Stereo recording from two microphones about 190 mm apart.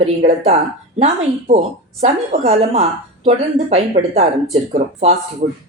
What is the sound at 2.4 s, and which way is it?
Speech, 35° right (ahead or behind).